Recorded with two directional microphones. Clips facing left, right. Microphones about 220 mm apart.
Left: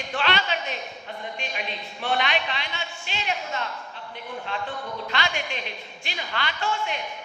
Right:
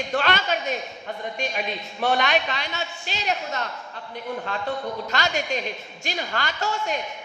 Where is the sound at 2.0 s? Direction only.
45° right (ahead or behind).